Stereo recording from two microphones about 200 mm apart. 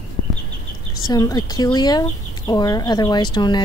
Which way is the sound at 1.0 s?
20° left (ahead or behind).